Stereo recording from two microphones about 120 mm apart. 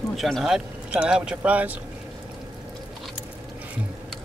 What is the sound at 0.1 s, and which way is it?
Speech, centre (ahead or behind).